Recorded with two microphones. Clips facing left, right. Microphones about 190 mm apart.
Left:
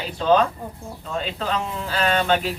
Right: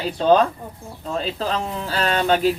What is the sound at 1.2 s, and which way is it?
Speech, 35° right (ahead or behind).